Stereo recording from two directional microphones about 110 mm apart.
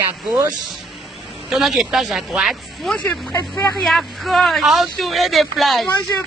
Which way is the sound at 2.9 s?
10° left (ahead or behind).